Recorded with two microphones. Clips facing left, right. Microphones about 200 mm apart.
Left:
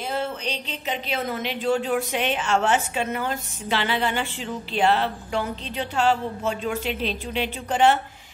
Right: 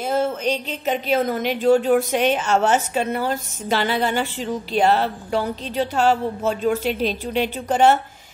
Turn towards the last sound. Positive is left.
turn(degrees=-40)  # may be behind; listen again after turning